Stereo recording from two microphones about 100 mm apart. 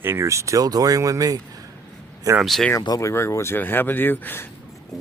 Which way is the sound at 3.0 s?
30° left (ahead or behind).